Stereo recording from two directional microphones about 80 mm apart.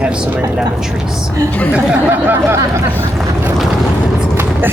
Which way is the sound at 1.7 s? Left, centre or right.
Right.